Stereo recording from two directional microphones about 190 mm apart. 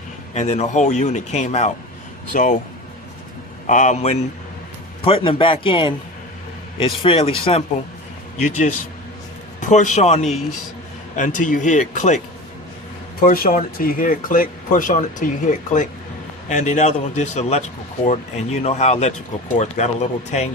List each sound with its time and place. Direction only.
0.3 s speech: 35° left (ahead or behind)
3.7 s a man's voice: 40° left (ahead or behind)
13.1 s speech: 50° left (ahead or behind)